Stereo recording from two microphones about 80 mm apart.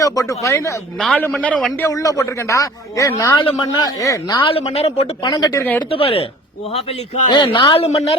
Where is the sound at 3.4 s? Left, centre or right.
Left.